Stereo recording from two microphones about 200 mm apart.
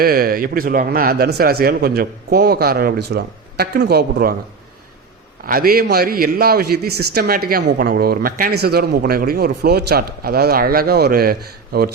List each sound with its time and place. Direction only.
0.0 s a man's voice: 45° right (ahead or behind)
5.5 s a man's voice: 45° right (ahead or behind)